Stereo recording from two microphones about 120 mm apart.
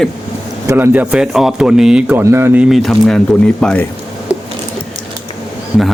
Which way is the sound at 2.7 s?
Centre (ahead or behind).